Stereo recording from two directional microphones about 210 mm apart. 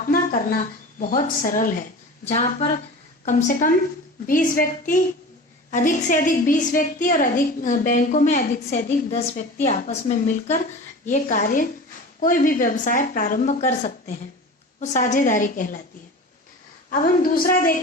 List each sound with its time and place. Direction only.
0.1 s a woman's voice: 40° left (ahead or behind)
16.9 s a woman's voice: 40° left (ahead or behind)